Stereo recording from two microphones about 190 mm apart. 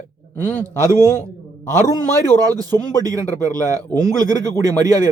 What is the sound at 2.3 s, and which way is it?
Speech, 20° right (ahead or behind).